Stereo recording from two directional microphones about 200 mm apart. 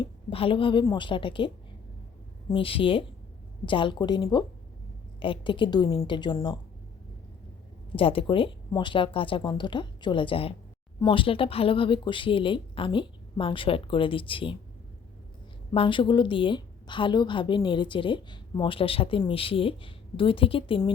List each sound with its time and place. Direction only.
0.0 s a woman's voice: 25° left (ahead or behind)
2.5 s a woman's voice: 25° left (ahead or behind)
7.9 s a woman's voice: 25° left (ahead or behind)
15.7 s a woman's voice: 25° left (ahead or behind)